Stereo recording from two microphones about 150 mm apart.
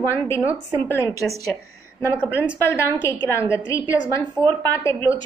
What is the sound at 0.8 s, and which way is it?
Speech, 15° left (ahead or behind).